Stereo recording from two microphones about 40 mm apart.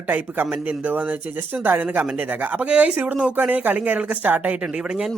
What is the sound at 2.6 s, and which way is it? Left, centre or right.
Speech, right.